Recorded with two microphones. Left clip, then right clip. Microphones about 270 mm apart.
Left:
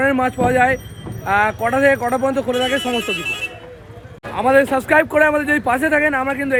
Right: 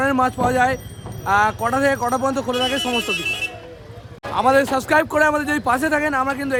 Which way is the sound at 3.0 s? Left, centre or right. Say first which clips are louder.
Even; centre.